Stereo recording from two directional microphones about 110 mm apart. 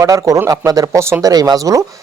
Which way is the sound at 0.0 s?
30° right (ahead or behind).